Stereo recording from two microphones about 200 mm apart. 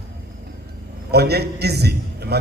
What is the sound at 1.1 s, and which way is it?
Speech, 55° right (ahead or behind).